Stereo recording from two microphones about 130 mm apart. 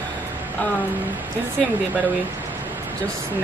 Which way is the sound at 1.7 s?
15° right (ahead or behind).